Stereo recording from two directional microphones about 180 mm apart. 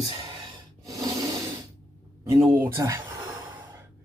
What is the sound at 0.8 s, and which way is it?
Rub, 20° right (ahead or behind).